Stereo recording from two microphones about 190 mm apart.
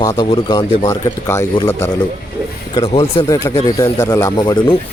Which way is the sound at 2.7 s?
30° left (ahead or behind).